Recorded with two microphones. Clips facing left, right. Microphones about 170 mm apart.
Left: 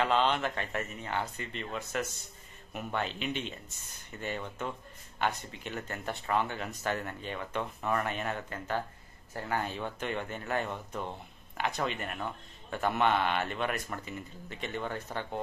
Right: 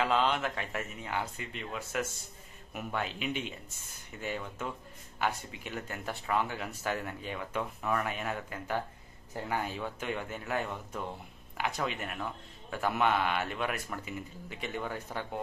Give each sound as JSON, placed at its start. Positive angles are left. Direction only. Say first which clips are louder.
{"t": 0.0, "sound": "speech", "louder": "left 1 dB", "side_deg": -5}